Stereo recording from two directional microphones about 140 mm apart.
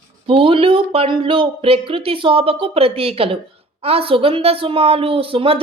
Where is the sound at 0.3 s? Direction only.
40° right (ahead or behind).